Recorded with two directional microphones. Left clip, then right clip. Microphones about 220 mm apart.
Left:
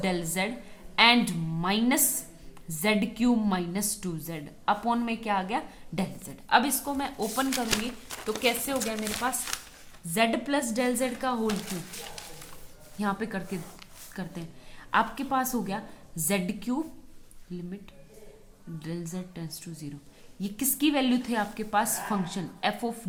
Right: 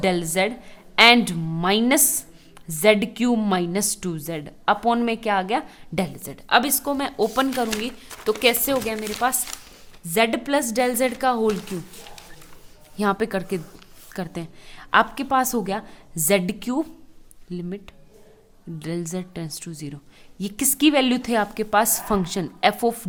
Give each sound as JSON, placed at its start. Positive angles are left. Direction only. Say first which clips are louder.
{"t": 0.0, "sound": "a woman's voice", "louder": "right 8 dB", "side_deg": -40}
{"t": 13.0, "sound": "a woman's voice", "louder": "right 9 dB", "side_deg": -45}
{"t": 18.8, "sound": "a woman's voice", "louder": "right 9 dB", "side_deg": -45}